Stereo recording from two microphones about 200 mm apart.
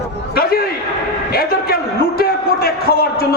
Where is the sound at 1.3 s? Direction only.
50° left (ahead or behind).